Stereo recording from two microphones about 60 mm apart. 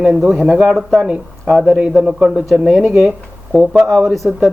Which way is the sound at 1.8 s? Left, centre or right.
Centre.